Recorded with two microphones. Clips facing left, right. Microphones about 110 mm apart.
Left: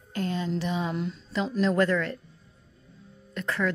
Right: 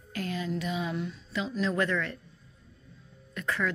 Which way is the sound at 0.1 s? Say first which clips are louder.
Left 4 dB; 30° left (ahead or behind).